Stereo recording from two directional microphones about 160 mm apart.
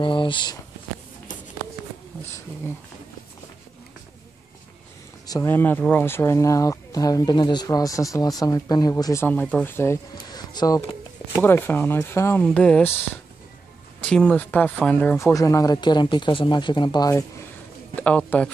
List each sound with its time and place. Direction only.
0.0 s speech: 30° left (ahead or behind)
5.2 s a sound: 25° left (ahead or behind)
5.5 s speech: 10° left (ahead or behind)
14.0 s speech: 5° left (ahead or behind); by 17.2 s 25° left (ahead or behind)
17.9 s speech: 10° left (ahead or behind)